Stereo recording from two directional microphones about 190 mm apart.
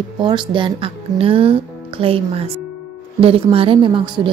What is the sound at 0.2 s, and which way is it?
Speech, 25° right (ahead or behind).